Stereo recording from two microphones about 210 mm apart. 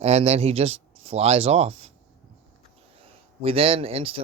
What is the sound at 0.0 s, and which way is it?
Speech, 30° right (ahead or behind).